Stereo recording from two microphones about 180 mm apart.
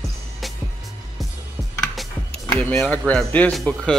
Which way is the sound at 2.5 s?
10° left (ahead or behind).